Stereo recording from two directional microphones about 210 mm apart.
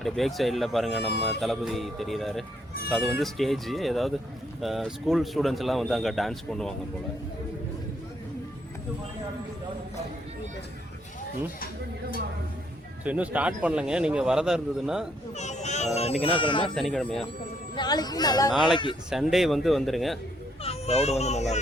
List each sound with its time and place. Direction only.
0.0 s a man's voice: centre (ahead or behind)
13.1 s a man's voice: 5° right (ahead or behind)
15.4 s speech: 35° left (ahead or behind)
16.7 s a man's voice: centre (ahead or behind)
17.7 s speech: 20° left (ahead or behind)
19.1 s a man's voice: centre (ahead or behind)
20.7 s speech: 30° left (ahead or behind)